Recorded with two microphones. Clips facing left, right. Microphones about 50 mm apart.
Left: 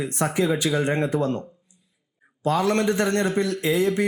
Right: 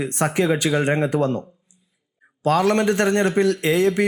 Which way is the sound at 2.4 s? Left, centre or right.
Right.